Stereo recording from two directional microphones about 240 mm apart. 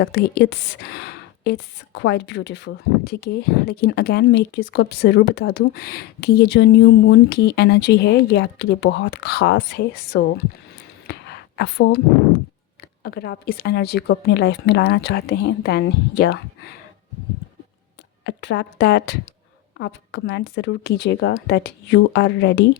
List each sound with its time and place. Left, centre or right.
0.0 s a woman's voice: left
11.0 s a sound: left
13.0 s a woman's voice: left
18.3 s a woman's voice: left